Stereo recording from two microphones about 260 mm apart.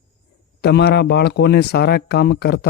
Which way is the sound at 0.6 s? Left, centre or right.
Left.